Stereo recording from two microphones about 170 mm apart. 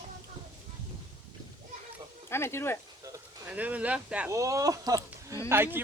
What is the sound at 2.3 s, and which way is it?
Speech, 15° left (ahead or behind).